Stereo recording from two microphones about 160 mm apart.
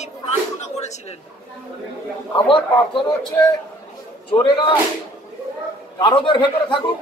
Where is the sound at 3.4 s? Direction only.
20° left (ahead or behind).